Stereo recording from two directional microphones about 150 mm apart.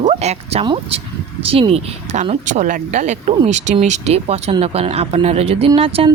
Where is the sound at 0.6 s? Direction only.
35° right (ahead or behind).